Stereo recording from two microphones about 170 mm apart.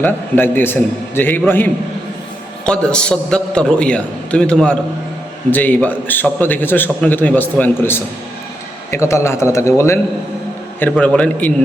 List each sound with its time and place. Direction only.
0.0 s a man's voice: 10° left (ahead or behind)
2.6 s a man's voice: 5° left (ahead or behind)